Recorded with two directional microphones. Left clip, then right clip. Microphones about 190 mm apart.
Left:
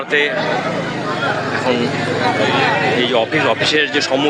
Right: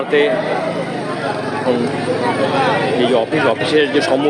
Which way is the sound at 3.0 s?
15° right (ahead or behind).